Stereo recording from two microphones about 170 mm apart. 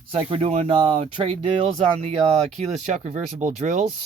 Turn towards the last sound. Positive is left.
turn(degrees=-45)  # may be behind; listen again after turning